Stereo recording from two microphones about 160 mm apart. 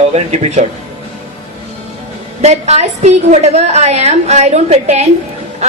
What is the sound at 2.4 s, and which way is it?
A woman's voice, 45° right (ahead or behind).